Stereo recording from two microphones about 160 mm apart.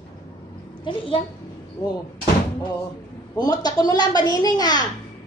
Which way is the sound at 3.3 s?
25° left (ahead or behind).